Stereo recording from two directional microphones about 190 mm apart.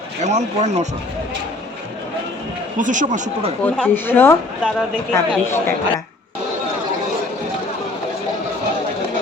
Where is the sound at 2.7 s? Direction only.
40° right (ahead or behind).